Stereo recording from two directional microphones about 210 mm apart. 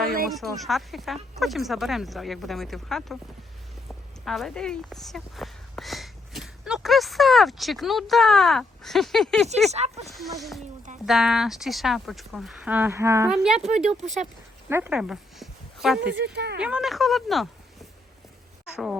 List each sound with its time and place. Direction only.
0.3 s speech: centre (ahead or behind)
4.3 s speech: centre (ahead or behind)
9.7 s speech: 30° right (ahead or behind)
10.0 s speech: centre (ahead or behind)
14.0 s speech: 35° right (ahead or behind)
14.7 s a sound: 10° right (ahead or behind)
16.1 s speech: 55° right (ahead or behind)
16.6 s speech: 5° right (ahead or behind)